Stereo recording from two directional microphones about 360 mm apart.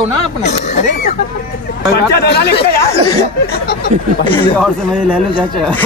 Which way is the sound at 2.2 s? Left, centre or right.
Left.